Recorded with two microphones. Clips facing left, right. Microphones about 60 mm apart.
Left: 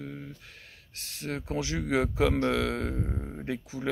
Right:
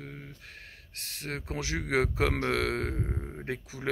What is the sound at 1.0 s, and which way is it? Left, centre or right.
Speech, right.